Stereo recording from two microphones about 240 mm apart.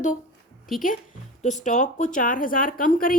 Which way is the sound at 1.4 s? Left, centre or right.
Left.